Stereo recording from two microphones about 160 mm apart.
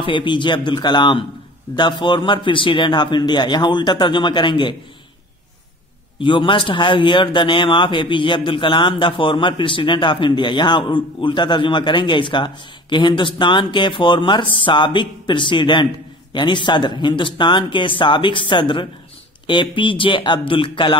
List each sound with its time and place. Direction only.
0.0 s a man's voice: 30° left (ahead or behind)
6.1 s a man's voice: 30° left (ahead or behind)